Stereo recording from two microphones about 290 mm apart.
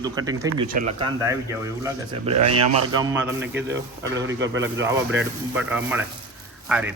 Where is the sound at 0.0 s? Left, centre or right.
Centre.